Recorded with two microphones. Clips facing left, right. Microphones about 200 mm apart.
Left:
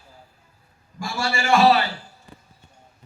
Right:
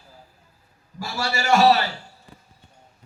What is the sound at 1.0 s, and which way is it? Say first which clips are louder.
Speech: left 1 dB; 40° right (ahead or behind).